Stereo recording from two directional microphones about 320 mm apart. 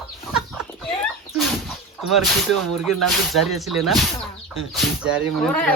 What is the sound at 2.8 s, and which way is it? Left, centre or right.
Speech, centre.